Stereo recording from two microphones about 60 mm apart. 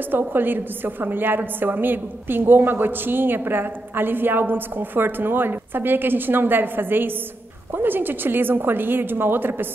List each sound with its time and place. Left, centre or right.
0.1 s a woman's voice: right